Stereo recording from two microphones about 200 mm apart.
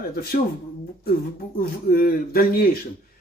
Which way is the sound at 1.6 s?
45° left (ahead or behind).